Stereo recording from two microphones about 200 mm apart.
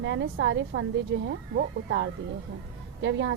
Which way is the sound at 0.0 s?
65° right (ahead or behind).